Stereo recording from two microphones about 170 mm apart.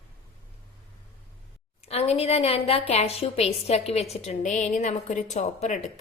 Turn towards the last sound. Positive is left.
turn(degrees=40)  # may be behind; listen again after turning